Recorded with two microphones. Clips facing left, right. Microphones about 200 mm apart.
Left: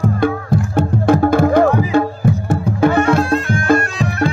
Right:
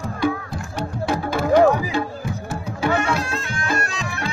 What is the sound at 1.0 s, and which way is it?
Music, 55° left (ahead or behind).